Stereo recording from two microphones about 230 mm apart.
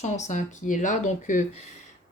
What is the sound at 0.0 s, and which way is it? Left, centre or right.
Speech, left.